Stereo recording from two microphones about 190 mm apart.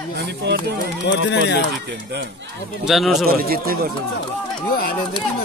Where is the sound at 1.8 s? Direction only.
60° right (ahead or behind).